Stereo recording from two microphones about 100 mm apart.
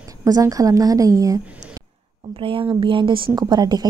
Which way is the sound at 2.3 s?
60° right (ahead or behind).